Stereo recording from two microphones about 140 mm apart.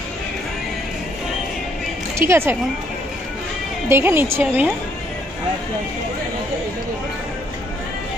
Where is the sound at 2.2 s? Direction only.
15° right (ahead or behind).